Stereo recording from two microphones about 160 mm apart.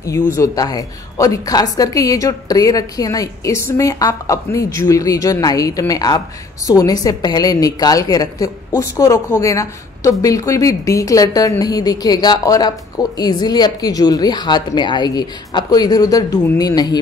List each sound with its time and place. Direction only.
0.4 s a woman's voice: 25° left (ahead or behind)